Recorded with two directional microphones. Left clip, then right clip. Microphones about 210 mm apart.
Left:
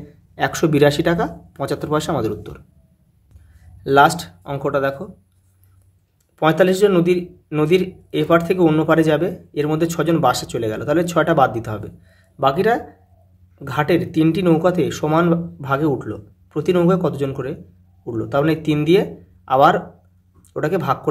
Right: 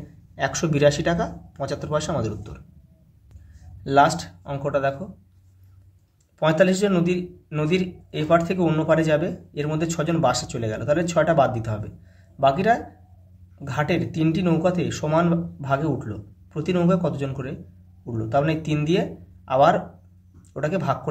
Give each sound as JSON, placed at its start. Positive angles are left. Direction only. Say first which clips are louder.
{"t": 0.4, "sound": "a man's voice", "louder": "left 5 dB", "side_deg": 30}
{"t": 3.8, "sound": "a man's voice", "louder": "left 5 dB", "side_deg": 30}
{"t": 6.3, "sound": "a man's voice", "louder": "left 4 dB", "side_deg": 25}